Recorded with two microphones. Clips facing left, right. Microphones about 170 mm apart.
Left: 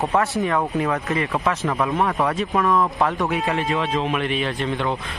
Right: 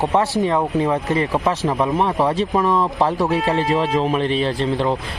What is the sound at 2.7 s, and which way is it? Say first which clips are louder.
Speech: right 2 dB; 35° right (ahead or behind).